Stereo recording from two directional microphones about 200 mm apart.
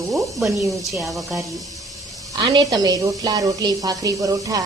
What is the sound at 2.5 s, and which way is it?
A woman's voice, 15° right (ahead or behind).